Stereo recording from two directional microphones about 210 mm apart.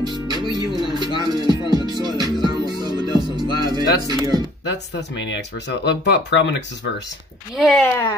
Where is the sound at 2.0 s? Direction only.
20° right (ahead or behind).